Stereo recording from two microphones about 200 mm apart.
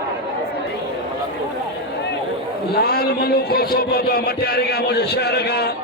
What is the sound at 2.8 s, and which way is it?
Speech, 50° left (ahead or behind).